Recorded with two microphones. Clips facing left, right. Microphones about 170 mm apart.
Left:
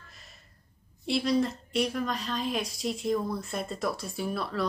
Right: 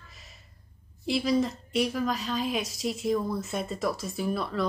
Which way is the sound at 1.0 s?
Centre (ahead or behind).